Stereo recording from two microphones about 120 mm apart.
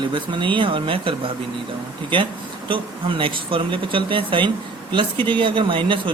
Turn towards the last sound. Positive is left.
turn(degrees=-45)  # may be behind; listen again after turning